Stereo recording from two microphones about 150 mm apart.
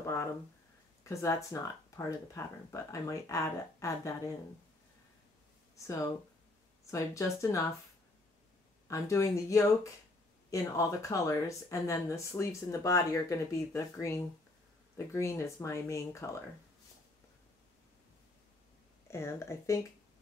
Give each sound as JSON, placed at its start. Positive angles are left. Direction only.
{"t": 0.0, "sound": "a sound", "side_deg": 20}
{"t": 1.0, "sound": "speech", "side_deg": 20}
{"t": 5.9, "sound": "speech", "side_deg": 20}
{"t": 8.8, "sound": "speech", "side_deg": 20}
{"t": 19.0, "sound": "speech", "side_deg": 20}